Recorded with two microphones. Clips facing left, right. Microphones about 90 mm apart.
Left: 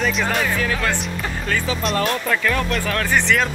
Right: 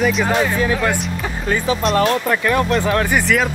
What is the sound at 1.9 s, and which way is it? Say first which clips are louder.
Speech: right 4 dB; 25° right (ahead or behind).